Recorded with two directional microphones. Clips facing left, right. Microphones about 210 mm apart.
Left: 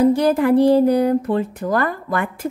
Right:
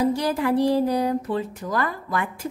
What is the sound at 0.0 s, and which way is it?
A woman's voice, 55° left (ahead or behind).